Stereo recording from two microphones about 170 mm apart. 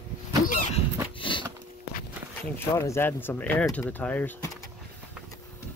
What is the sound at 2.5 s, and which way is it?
Speech, 15° left (ahead or behind).